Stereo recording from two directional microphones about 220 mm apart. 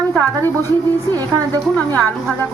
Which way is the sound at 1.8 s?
10° left (ahead or behind).